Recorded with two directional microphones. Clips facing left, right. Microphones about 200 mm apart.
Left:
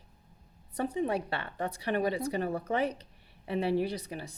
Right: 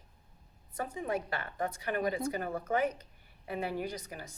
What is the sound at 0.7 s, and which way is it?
Speech, 35° left (ahead or behind).